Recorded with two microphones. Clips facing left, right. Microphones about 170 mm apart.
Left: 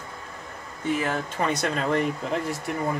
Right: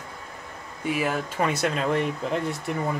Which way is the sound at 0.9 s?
5° right (ahead or behind).